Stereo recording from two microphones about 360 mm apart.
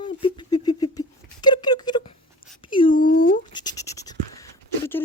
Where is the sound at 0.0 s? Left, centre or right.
Centre.